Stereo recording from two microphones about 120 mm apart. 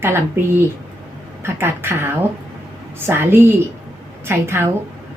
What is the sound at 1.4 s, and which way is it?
A woman's voice, 20° right (ahead or behind).